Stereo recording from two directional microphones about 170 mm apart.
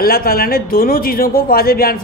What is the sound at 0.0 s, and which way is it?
A man's voice, 60° left (ahead or behind).